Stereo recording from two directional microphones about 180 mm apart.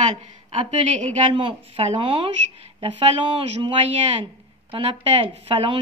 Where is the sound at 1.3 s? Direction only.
30° right (ahead or behind).